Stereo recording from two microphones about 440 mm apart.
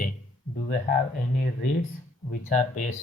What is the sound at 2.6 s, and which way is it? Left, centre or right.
Speech, centre.